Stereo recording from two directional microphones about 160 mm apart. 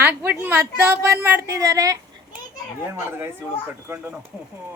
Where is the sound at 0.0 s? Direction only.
15° right (ahead or behind).